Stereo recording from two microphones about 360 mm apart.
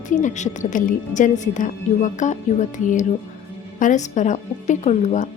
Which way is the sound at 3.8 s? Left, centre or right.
Left.